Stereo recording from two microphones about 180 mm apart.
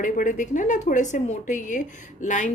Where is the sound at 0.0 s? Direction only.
45° left (ahead or behind).